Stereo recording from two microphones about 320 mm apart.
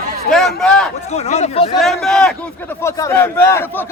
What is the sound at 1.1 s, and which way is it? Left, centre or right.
Speech, left.